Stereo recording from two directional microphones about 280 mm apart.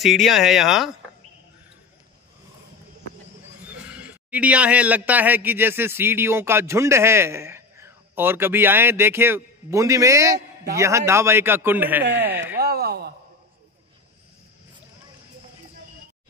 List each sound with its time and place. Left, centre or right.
0.0 s speech: centre
3.6 s a man's voice: centre
12.5 s speech: right